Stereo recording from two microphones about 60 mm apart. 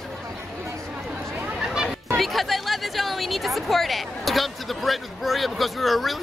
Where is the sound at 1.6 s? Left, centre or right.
Centre.